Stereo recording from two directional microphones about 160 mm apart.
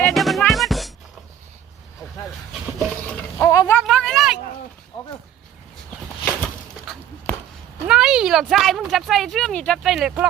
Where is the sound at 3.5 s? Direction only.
15° left (ahead or behind).